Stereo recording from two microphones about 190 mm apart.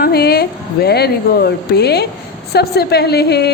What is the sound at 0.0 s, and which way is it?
A woman's voice, 55° left (ahead or behind).